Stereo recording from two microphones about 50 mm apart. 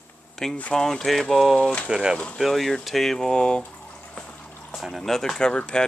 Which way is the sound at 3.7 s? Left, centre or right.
Left.